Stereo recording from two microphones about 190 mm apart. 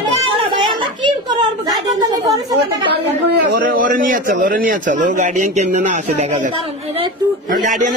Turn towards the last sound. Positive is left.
turn(degrees=-40)  # may be behind; listen again after turning